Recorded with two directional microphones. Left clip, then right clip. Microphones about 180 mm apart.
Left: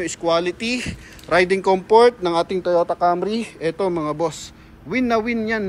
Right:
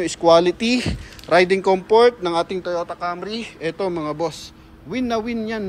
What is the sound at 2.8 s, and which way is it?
Speech, 15° left (ahead or behind).